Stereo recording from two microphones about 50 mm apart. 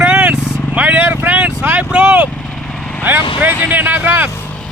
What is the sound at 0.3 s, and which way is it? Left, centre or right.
Vehicle, left.